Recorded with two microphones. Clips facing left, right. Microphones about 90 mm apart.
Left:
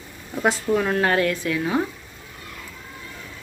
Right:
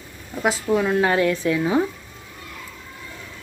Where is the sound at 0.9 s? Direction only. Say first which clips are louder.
Right 2 dB; 15° right (ahead or behind).